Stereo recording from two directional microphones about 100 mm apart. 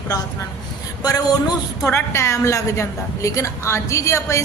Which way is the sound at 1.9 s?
25° left (ahead or behind).